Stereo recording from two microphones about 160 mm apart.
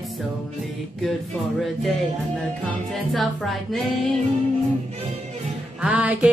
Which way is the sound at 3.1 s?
Centre (ahead or behind).